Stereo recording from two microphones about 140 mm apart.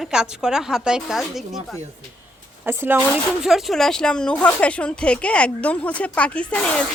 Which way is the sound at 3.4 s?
Centre (ahead or behind).